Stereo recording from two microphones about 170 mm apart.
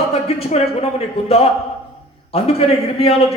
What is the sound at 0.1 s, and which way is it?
A man's voice, 35° left (ahead or behind).